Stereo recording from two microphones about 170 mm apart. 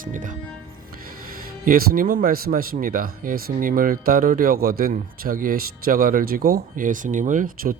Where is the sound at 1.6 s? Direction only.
55° right (ahead or behind).